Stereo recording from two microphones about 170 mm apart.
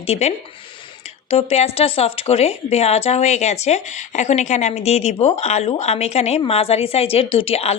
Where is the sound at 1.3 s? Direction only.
35° left (ahead or behind).